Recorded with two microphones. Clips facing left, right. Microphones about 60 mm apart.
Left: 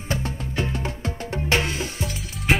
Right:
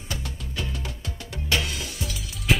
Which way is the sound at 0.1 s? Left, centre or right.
Left.